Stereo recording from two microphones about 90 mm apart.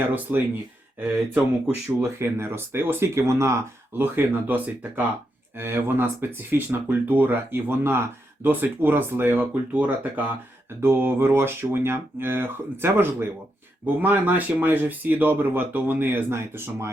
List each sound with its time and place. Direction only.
0.1 s speech: 20° right (ahead or behind)
2.0 s speech: 30° right (ahead or behind)